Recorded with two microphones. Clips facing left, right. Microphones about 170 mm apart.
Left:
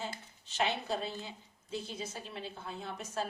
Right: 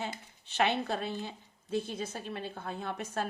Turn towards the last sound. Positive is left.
turn(degrees=-60)  # may be behind; listen again after turning